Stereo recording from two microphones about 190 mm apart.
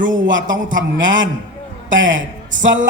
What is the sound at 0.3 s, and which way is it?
A man's voice, 80° right.